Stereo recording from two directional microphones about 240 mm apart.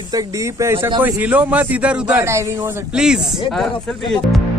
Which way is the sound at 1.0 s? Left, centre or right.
Centre.